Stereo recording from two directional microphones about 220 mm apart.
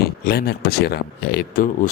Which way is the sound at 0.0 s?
45° left (ahead or behind).